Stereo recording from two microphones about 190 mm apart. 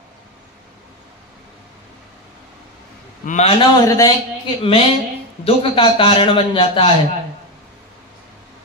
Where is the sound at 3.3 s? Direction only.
35° left (ahead or behind).